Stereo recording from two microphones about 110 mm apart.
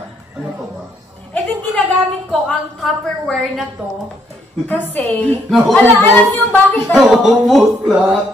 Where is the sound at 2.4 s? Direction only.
Centre (ahead or behind).